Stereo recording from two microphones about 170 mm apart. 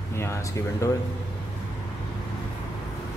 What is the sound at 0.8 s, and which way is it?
Speech, 15° left (ahead or behind).